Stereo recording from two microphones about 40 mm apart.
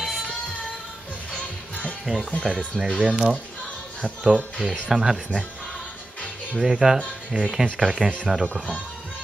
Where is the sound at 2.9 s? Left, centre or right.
Right.